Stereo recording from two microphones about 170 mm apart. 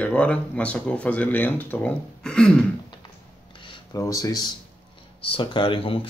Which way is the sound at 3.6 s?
30° left (ahead or behind).